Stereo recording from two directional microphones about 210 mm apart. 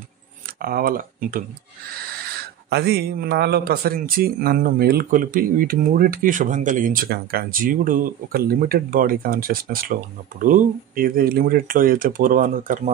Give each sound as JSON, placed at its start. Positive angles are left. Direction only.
{"t": 0.5, "sound": "speech", "side_deg": -45}